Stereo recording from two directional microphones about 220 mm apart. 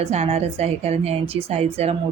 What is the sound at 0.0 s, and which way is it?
A woman's voice, 30° right (ahead or behind).